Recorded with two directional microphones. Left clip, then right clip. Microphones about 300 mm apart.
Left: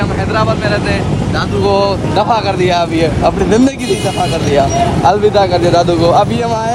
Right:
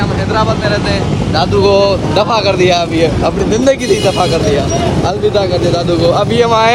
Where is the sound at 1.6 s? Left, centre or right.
Centre.